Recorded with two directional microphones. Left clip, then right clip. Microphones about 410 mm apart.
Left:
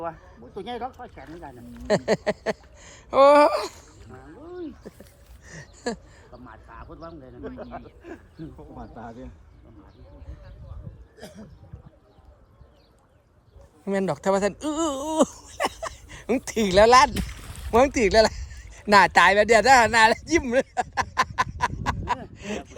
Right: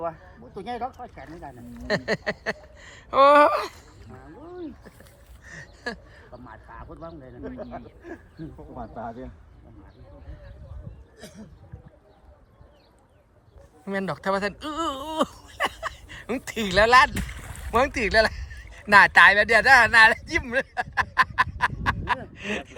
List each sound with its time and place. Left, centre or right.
0.2 s a man's voice: centre
0.7 s speech: centre
1.9 s speech: centre
4.0 s a sound: centre
5.5 s a sound: centre
6.3 s speech: centre
8.7 s speech: centre
11.2 s speech: centre
13.8 s speech: centre
17.2 s boat: centre
17.7 s speech: centre
22.2 s gasp: centre